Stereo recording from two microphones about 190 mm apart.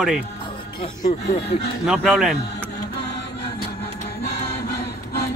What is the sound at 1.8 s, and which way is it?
Speech, centre (ahead or behind).